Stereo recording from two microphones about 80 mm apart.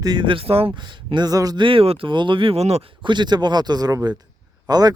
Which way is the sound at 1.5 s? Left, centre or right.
Right.